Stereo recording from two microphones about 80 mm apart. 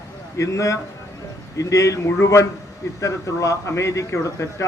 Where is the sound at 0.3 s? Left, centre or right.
Left.